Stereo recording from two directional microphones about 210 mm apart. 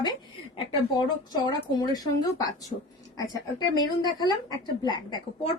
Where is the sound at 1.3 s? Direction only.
20° left (ahead or behind).